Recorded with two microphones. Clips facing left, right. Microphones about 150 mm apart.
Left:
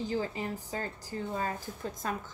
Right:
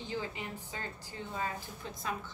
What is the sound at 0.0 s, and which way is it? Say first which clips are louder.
A woman's voice: left 6 dB; 40° left (ahead or behind).